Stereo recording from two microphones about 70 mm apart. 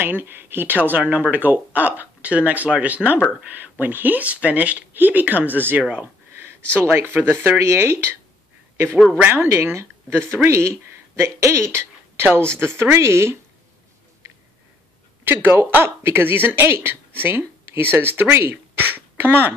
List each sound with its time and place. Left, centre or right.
0.0 s speech: right
9.3 s speech: right
15.2 s speech: right